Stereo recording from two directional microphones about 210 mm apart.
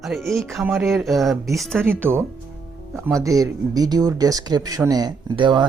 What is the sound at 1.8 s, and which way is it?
Speech, 10° right (ahead or behind).